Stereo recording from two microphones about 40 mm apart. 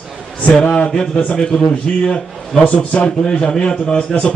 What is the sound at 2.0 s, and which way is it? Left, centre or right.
A man's voice, left.